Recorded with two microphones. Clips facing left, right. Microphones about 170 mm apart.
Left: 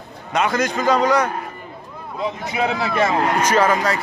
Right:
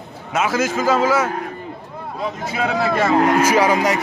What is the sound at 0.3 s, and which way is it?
A man's voice, 5° right (ahead or behind).